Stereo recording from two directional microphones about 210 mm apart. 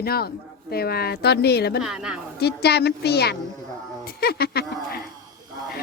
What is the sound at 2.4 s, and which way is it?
Speech, 50° left (ahead or behind).